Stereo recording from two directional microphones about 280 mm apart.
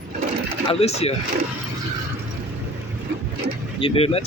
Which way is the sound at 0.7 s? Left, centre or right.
Left.